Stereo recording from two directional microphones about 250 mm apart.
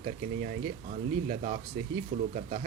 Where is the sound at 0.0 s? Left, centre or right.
Right.